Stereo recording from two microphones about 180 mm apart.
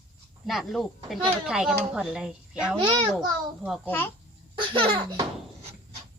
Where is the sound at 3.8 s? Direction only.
10° left (ahead or behind).